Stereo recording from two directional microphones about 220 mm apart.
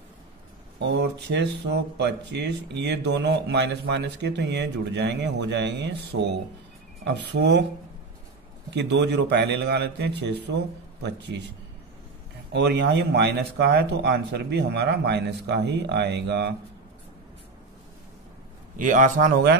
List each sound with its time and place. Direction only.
0.7 s speech: 50° right (ahead or behind)
7.2 s speech: 50° right (ahead or behind)
8.6 s speech: 50° right (ahead or behind)
12.5 s speech: 50° right (ahead or behind)
18.8 s a man's voice: 35° right (ahead or behind)